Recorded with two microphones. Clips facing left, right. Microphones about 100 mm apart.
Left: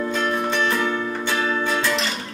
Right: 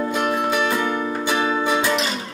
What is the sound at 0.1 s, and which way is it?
Music, 10° right (ahead or behind).